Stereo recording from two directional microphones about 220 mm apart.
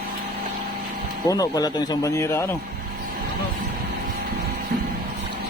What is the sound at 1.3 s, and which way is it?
Speech, 15° left (ahead or behind).